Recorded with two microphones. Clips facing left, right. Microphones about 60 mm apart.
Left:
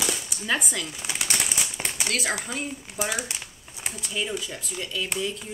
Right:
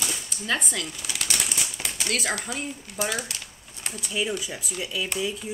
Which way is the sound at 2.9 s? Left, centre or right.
Centre.